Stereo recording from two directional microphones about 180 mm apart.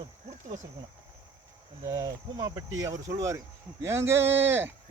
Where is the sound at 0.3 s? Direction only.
40° right (ahead or behind).